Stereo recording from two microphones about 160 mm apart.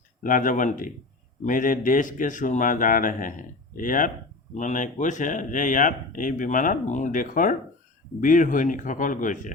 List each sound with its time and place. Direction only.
0.2 s speech: 55° left (ahead or behind)